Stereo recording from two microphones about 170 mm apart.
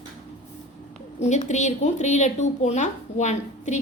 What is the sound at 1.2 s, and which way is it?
Speech, 40° left (ahead or behind).